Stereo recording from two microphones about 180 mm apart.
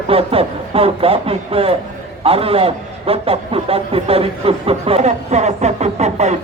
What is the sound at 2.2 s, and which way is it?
A man's voice, 30° right (ahead or behind).